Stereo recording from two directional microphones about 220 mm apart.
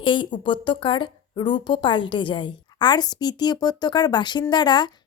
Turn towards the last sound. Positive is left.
turn(degrees=20)  # may be behind; listen again after turning